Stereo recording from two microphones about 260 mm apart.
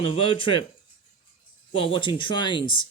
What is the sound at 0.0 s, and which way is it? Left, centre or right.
Speech, left.